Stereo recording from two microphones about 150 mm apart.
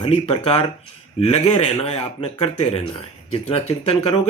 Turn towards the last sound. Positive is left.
turn(degrees=40)  # may be behind; listen again after turning